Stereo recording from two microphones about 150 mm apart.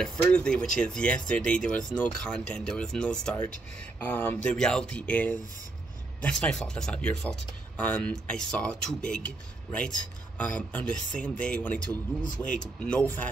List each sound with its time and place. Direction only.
0.0 s speech: 5° left (ahead or behind)